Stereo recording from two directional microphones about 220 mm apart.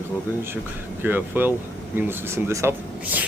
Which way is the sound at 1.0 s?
10° right (ahead or behind).